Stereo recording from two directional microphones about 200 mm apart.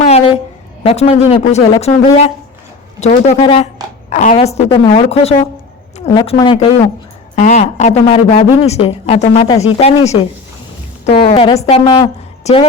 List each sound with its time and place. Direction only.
0.0 s a sound: 30° left (ahead or behind)
0.9 s a woman's voice: 30° left (ahead or behind)
7.3 s a woman's voice: 35° left (ahead or behind)